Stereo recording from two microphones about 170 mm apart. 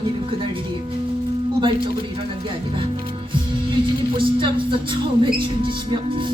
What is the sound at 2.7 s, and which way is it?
Music, 30° right (ahead or behind).